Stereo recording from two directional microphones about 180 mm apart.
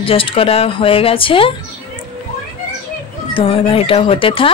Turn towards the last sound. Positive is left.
turn(degrees=30)  # may be behind; listen again after turning